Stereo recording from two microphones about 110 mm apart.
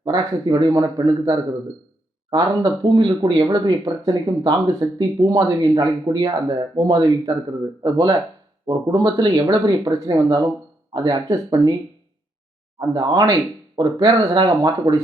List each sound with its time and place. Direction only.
0.0 s speech: 35° right (ahead or behind)
12.8 s speech: 35° right (ahead or behind)